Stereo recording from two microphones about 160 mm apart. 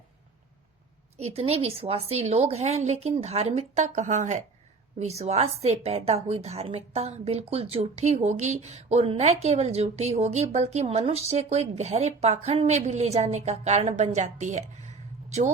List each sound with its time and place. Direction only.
1.1 s a woman's voice: 40° right (ahead or behind)